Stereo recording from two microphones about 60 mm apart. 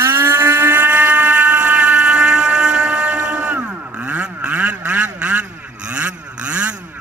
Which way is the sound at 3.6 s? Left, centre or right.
Right.